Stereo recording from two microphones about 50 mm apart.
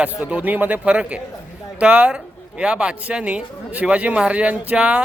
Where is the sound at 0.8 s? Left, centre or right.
Right.